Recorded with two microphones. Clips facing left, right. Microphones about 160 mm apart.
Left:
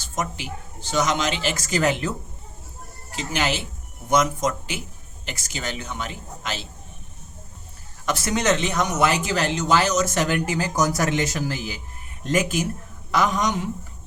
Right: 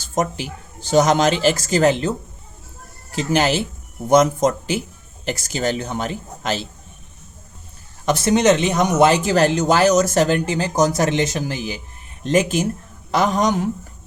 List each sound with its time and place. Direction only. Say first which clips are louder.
0.1 s speech: right 7 dB; 35° right (ahead or behind)
3.2 s speech: right 7 dB; 35° right (ahead or behind)
8.0 s speech: right 7 dB; 25° right (ahead or behind)